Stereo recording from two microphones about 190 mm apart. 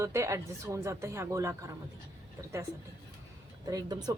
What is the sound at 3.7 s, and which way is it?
Speech, 20° right (ahead or behind).